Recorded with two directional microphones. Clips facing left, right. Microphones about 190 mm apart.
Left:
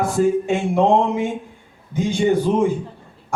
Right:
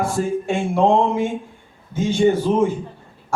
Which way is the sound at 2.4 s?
15° left (ahead or behind).